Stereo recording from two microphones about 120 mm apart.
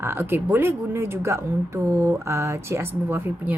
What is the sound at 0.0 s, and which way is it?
A woman's voice, 20° right (ahead or behind).